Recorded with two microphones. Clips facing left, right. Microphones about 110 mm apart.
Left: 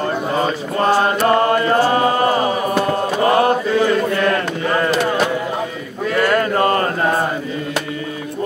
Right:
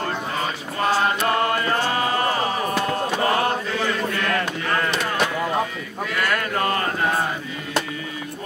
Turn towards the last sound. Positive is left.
turn(degrees=35)  # may be behind; listen again after turning